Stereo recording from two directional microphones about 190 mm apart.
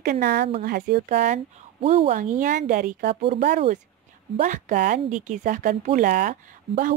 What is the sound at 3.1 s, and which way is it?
Speech, 30° right (ahead or behind).